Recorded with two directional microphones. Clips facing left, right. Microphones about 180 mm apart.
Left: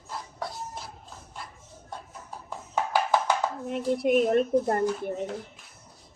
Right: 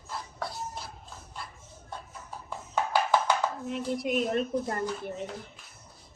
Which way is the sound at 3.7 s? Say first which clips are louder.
Left 9 dB; 55° left (ahead or behind).